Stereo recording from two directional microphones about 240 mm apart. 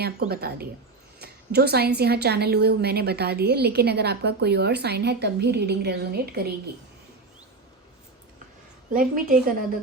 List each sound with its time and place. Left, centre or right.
0.3 s a woman's voice: right
8.9 s a woman's voice: right